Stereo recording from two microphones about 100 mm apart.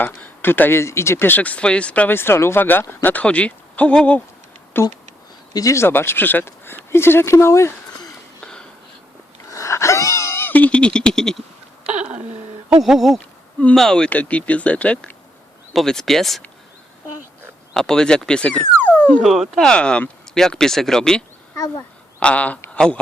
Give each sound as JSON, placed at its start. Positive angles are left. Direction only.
{"t": 0.0, "sound": "speech", "side_deg": 20}
{"t": 8.0, "sound": "a sound", "side_deg": 5}
{"t": 9.5, "sound": "a sound", "side_deg": 30}
{"t": 11.9, "sound": "a sound", "side_deg": -15}
{"t": 12.8, "sound": "speech", "side_deg": 0}
{"t": 17.7, "sound": "speech", "side_deg": 5}
{"t": 19.2, "sound": "speech", "side_deg": 0}
{"t": 21.5, "sound": "speech", "side_deg": 35}
{"t": 22.2, "sound": "speech", "side_deg": 15}